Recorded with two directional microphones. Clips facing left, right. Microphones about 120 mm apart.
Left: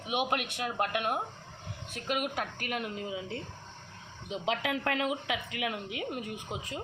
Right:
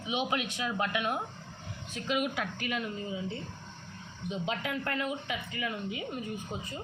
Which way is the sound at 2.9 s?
90° left.